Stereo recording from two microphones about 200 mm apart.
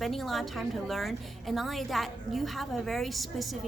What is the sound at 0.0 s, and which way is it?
A woman's voice, centre (ahead or behind).